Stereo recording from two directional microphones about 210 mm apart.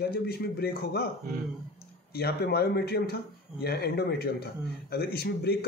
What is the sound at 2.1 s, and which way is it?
A man's voice, 50° left (ahead or behind).